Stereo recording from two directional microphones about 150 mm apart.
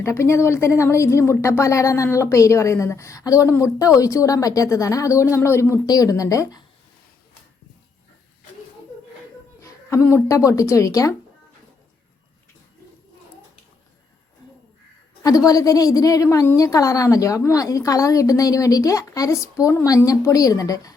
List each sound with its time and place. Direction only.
0.0 s speech: 20° left (ahead or behind)
9.6 s a woman's voice: 20° left (ahead or behind)
15.4 s speech: 25° left (ahead or behind)